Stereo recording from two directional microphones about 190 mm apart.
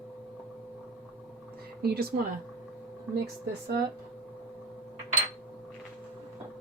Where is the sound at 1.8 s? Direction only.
55° right (ahead or behind).